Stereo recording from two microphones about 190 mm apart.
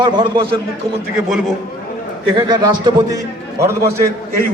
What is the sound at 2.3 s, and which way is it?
A man's voice, 20° right (ahead or behind).